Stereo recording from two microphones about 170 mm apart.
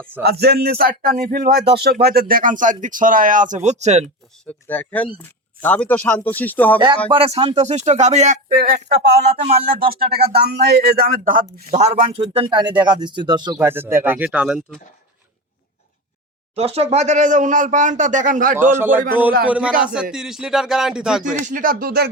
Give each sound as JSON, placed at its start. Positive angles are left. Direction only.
{"t": 0.2, "sound": "speech", "side_deg": -70}
{"t": 4.4, "sound": "speech", "side_deg": 10}
{"t": 7.1, "sound": "speech", "side_deg": -35}
{"t": 13.6, "sound": "speech", "side_deg": -10}
{"t": 14.3, "sound": "music", "side_deg": -5}
{"t": 16.6, "sound": "speech", "side_deg": -35}
{"t": 18.7, "sound": "speech", "side_deg": -10}
{"t": 19.8, "sound": "music", "side_deg": -5}
{"t": 21.4, "sound": "speech", "side_deg": -55}